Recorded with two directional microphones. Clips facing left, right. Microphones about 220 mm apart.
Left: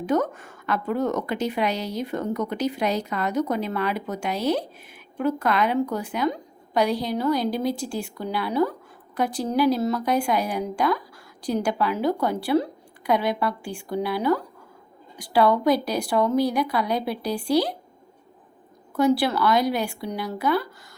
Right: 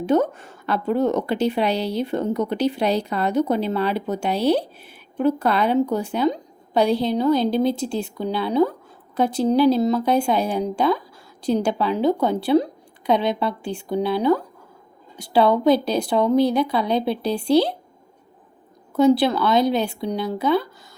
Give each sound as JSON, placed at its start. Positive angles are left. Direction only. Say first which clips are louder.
{"t": 0.0, "sound": "a woman's voice", "louder": "right 4 dB", "side_deg": -25}
{"t": 18.9, "sound": "a woman's voice", "louder": "right 4 dB", "side_deg": -20}